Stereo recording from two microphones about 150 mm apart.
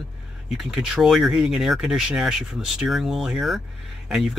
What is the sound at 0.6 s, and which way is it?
Speech, 5° right (ahead or behind).